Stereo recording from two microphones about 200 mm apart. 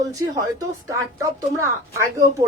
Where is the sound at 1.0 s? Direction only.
15° right (ahead or behind).